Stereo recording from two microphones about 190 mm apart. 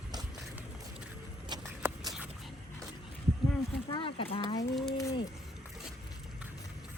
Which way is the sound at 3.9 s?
30° left (ahead or behind).